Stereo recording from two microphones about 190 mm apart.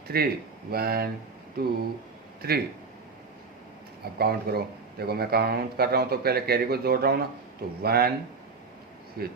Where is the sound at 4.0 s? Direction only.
55° right (ahead or behind).